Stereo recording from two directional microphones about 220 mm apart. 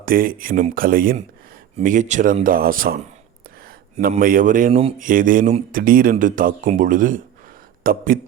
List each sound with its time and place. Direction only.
0.0 s speech: 40° right (ahead or behind)
4.8 s speech: 25° right (ahead or behind)
5.0 s speech: 40° right (ahead or behind)